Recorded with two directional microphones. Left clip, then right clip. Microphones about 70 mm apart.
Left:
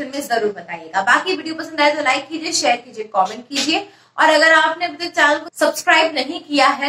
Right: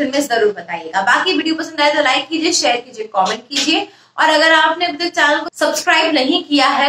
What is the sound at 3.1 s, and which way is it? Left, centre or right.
A woman's voice, right.